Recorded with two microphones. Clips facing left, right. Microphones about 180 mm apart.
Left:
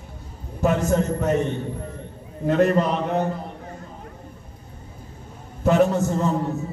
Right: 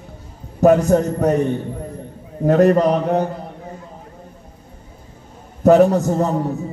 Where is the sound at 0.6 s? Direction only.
40° right (ahead or behind).